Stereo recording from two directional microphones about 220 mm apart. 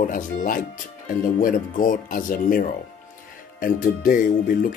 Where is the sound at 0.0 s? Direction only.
40° left (ahead or behind).